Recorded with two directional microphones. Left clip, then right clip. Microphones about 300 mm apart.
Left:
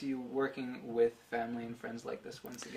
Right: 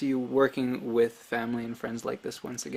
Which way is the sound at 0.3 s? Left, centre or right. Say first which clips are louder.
Right 11 dB; right.